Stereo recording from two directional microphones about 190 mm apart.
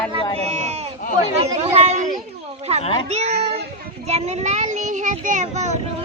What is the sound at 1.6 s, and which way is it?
A child's voice, 35° right (ahead or behind).